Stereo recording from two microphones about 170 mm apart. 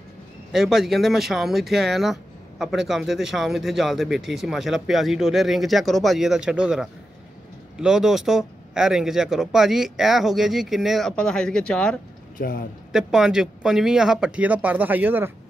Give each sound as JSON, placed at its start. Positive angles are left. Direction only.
{"t": 0.5, "sound": "a man's voice", "side_deg": -5}
{"t": 12.4, "sound": "a man's voice", "side_deg": 55}
{"t": 12.9, "sound": "a man's voice", "side_deg": -5}